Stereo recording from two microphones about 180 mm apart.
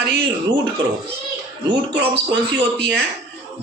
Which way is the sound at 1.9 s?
70° right (ahead or behind).